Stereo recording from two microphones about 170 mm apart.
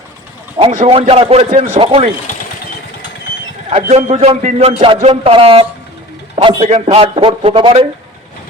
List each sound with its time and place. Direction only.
0.9 s a man's voice: 35° right (ahead or behind)
1.8 s a man's voice: 30° right (ahead or behind)
3.7 s a man's voice: 40° right (ahead or behind)